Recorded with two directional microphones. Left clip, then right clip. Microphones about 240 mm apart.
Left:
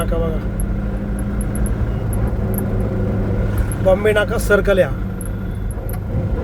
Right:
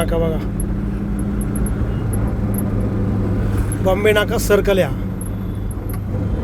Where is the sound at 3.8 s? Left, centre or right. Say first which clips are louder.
Left 1 dB; centre.